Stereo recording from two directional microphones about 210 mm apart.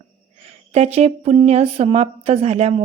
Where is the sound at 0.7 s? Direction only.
30° right (ahead or behind).